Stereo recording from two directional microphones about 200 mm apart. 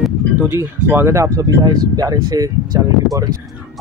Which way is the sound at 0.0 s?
10° right (ahead or behind).